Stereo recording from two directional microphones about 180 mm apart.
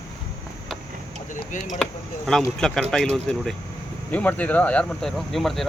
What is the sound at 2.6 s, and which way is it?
Speech, 5° left (ahead or behind).